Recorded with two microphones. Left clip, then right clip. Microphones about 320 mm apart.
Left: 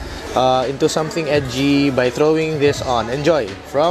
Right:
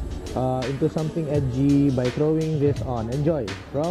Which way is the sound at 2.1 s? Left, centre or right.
Centre.